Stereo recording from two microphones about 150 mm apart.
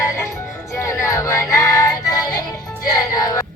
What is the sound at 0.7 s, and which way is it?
Music, 20° left (ahead or behind).